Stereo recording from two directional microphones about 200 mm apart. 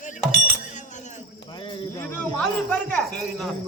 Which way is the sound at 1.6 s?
10° left (ahead or behind).